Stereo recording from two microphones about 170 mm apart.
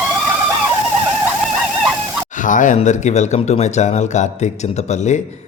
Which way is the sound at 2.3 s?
50° left (ahead or behind).